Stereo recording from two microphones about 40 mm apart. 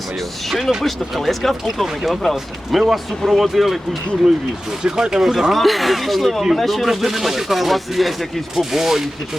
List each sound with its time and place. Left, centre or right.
0.4 s speech: centre
4.8 s speech: centre
5.2 s speech: centre